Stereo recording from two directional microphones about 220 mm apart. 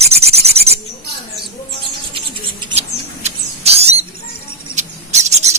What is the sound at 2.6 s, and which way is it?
Owl, 30° right (ahead or behind).